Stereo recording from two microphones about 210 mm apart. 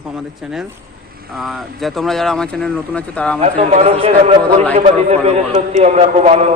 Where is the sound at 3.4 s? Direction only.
30° right (ahead or behind).